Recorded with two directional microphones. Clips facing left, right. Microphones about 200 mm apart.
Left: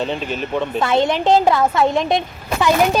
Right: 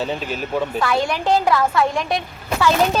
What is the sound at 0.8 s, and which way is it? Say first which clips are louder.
Speech: left 6 dB; 25° left (ahead or behind).